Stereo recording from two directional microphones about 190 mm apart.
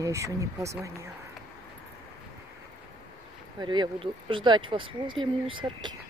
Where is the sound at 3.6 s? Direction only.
25° right (ahead or behind).